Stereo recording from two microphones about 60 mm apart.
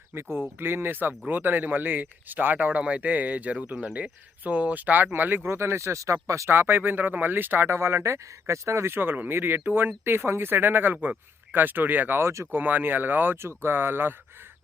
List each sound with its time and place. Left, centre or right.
0.6 s speech: right
6.5 s speech: right
9.0 s speech: right
12.2 s speech: right
12.5 s speech: right
13.3 s speech: right